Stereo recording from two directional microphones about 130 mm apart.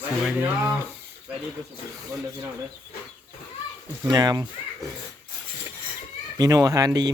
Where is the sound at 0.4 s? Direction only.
15° right (ahead or behind).